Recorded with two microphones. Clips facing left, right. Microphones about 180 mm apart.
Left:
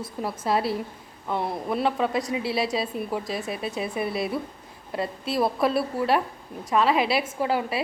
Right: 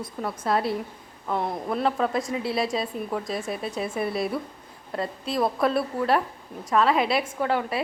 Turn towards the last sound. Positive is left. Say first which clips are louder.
# even
turn(degrees=5)  # may be behind; listen again after turning